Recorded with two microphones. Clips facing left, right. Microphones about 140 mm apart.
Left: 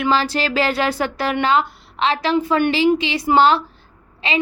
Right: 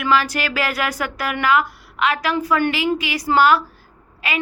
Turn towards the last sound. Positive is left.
turn(degrees=25)  # may be behind; listen again after turning